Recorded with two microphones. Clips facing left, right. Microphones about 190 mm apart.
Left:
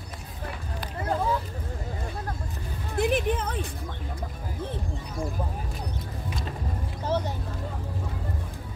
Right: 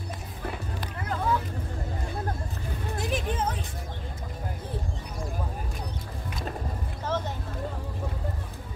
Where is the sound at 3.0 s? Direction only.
60° left (ahead or behind).